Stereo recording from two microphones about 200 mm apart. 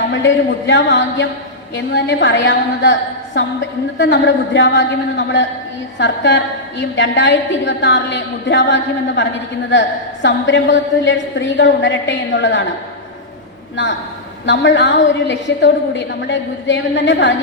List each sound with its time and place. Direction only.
0.7 s a woman's voice: 60° left (ahead or behind)
10.2 s a woman's voice: 65° left (ahead or behind)
14.4 s a woman's voice: 65° left (ahead or behind)